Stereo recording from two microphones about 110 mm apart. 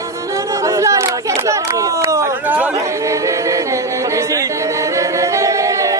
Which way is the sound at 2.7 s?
30° right (ahead or behind).